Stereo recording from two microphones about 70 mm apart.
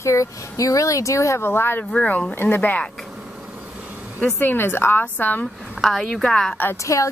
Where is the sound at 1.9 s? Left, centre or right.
Centre.